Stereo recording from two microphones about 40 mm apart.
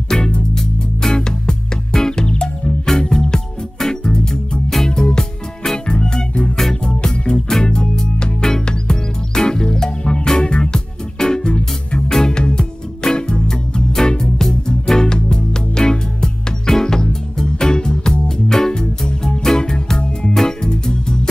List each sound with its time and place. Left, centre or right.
0.1 s music: centre